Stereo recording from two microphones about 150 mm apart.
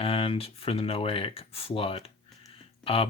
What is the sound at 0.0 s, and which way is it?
Speech, 40° left (ahead or behind).